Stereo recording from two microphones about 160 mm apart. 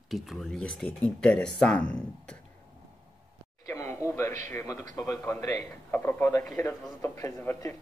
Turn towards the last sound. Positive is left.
turn(degrees=15)  # may be behind; listen again after turning